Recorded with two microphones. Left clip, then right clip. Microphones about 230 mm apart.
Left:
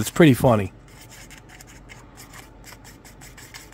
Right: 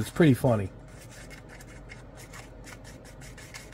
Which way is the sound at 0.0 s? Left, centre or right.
Left.